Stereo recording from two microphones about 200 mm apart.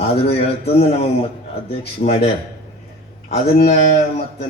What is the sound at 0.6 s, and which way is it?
A man's voice, 30° left (ahead or behind).